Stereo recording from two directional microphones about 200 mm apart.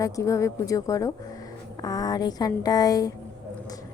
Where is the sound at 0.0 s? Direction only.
15° left (ahead or behind).